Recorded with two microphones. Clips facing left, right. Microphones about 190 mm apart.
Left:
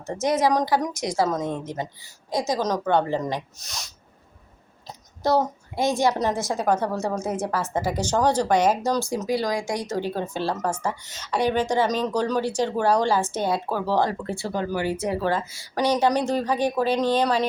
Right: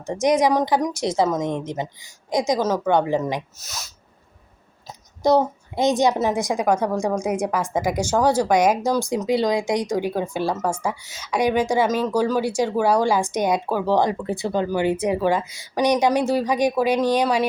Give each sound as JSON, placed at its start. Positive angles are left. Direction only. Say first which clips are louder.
{"t": 0.0, "sound": "a woman's voice", "louder": "right 3 dB", "side_deg": -15}
{"t": 3.6, "sound": "speech", "louder": "right 2 dB", "side_deg": 0}
{"t": 5.2, "sound": "a woman's voice", "louder": "right 4 dB", "side_deg": -15}